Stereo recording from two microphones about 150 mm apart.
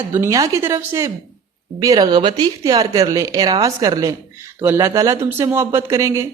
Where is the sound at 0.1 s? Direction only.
20° right (ahead or behind).